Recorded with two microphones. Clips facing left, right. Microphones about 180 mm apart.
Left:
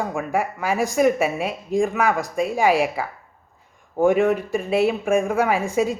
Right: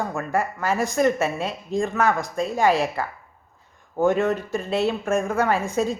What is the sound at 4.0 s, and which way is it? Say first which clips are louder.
A woman's voice: left 3 dB; 15° left (ahead or behind).